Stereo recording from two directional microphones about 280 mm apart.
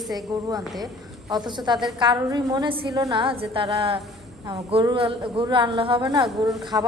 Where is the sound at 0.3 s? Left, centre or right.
Centre.